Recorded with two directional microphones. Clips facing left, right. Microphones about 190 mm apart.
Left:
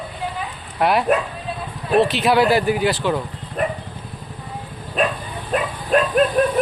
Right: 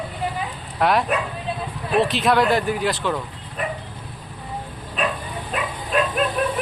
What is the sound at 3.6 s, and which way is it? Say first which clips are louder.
Dog: left 5 dB; 45° left (ahead or behind).